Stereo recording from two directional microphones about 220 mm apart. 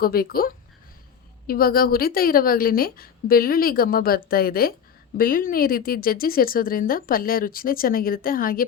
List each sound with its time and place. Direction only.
0.0 s a woman's voice: 45° left (ahead or behind)